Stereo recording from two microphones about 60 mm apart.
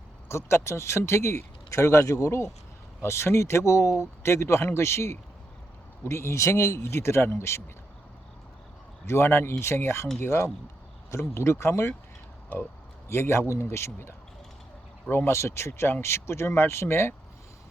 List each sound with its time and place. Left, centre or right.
0.3 s speech: left
3.0 s speech: left
9.0 s speech: left
13.1 s speech: left